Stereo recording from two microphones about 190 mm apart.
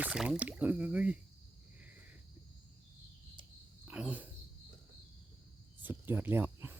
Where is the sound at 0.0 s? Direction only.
5° right (ahead or behind).